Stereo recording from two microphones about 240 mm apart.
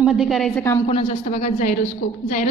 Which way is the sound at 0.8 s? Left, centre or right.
Left.